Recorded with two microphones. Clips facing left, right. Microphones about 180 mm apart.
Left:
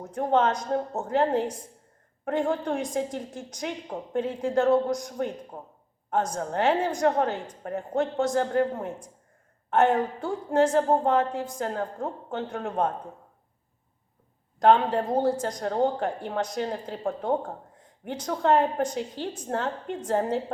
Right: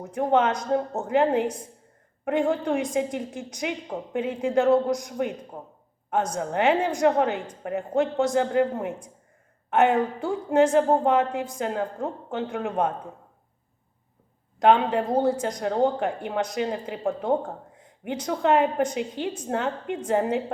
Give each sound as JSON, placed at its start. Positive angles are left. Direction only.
{"t": 0.1, "sound": "a woman's voice", "side_deg": -15}
{"t": 14.6, "sound": "a woman's voice", "side_deg": -15}